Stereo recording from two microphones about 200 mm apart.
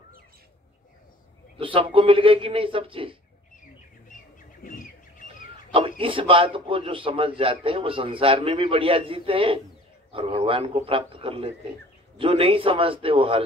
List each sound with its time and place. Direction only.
1.6 s a man's voice: 25° right (ahead or behind)
5.7 s a man's voice: 25° right (ahead or behind)